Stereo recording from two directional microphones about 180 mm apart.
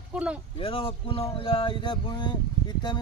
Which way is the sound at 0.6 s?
30° left (ahead or behind).